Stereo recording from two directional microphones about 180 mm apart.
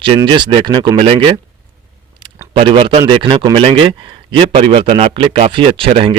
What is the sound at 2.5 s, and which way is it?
Speech, 30° right (ahead or behind).